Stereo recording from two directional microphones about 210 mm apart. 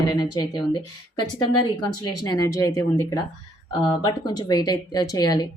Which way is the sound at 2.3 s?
15° left (ahead or behind).